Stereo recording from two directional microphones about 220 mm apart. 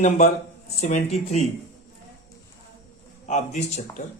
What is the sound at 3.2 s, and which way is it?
Speech, 30° left (ahead or behind).